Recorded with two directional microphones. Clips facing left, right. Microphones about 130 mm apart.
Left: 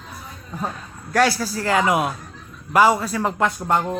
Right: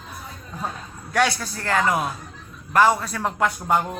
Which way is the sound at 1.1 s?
Centre (ahead or behind).